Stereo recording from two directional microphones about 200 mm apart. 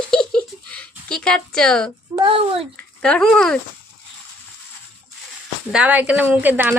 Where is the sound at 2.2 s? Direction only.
25° right (ahead or behind).